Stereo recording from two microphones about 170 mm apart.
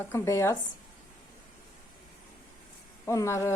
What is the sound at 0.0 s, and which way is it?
Speech, 15° left (ahead or behind).